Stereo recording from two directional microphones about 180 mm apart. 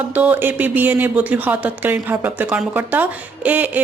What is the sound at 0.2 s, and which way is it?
A woman's voice, 10° right (ahead or behind).